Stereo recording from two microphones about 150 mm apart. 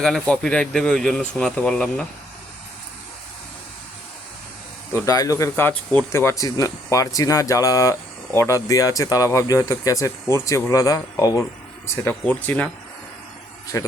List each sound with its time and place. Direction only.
0.0 s speech: 5° left (ahead or behind)
4.9 s speech: 25° left (ahead or behind)
12.0 s speech: 10° left (ahead or behind)
13.7 s speech: 20° left (ahead or behind)